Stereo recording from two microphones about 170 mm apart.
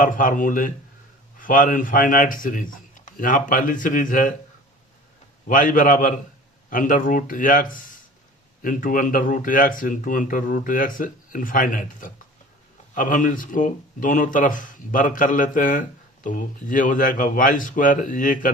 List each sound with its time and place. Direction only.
0.0 s speech: 50° left (ahead or behind)
5.5 s speech: 55° left (ahead or behind)